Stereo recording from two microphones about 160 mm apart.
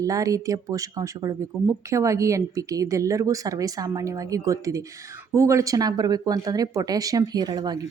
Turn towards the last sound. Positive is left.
turn(degrees=-25)  # may be behind; listen again after turning